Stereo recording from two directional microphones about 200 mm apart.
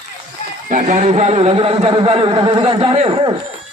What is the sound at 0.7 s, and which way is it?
Speech, 40° right (ahead or behind).